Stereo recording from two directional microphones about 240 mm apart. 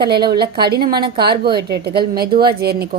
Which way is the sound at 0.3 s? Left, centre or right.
Right.